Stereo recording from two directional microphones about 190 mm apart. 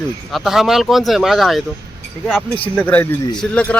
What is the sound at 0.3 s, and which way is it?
Speech, centre (ahead or behind).